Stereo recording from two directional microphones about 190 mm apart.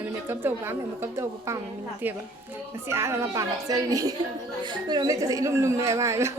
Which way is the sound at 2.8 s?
15° right (ahead or behind).